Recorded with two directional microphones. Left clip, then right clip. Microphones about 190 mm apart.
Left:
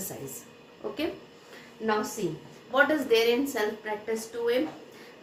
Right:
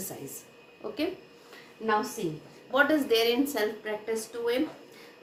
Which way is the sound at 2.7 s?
30° right (ahead or behind).